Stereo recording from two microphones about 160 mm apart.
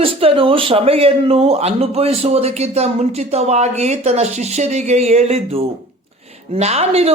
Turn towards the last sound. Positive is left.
turn(degrees=-40)  # may be behind; listen again after turning